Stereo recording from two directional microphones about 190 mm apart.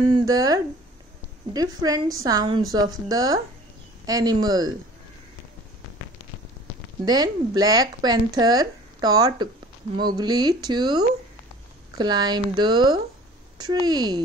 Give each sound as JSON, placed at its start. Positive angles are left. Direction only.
{"t": 0.1, "sound": "speech", "side_deg": -20}
{"t": 7.1, "sound": "speech", "side_deg": -20}